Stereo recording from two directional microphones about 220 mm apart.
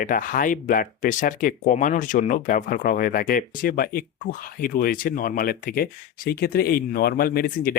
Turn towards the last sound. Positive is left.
turn(degrees=40)  # may be behind; listen again after turning